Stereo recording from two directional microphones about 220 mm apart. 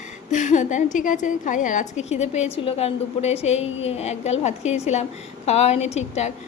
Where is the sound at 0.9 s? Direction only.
35° left (ahead or behind).